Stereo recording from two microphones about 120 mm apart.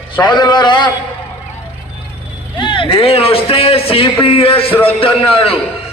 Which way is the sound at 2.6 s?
45° left (ahead or behind).